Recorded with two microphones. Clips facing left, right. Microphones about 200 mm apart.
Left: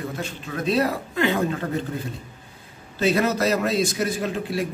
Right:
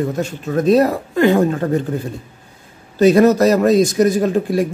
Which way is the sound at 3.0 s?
45° right (ahead or behind).